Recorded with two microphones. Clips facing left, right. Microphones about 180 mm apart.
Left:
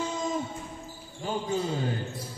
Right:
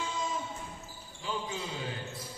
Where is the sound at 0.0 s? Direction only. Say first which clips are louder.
Left 5 dB; 40° left (ahead or behind).